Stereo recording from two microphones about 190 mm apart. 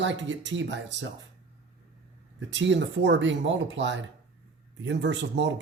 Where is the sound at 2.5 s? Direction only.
70° right (ahead or behind).